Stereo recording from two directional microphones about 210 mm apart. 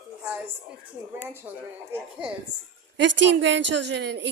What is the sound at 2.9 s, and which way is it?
A woman's voice, 60° right (ahead or behind).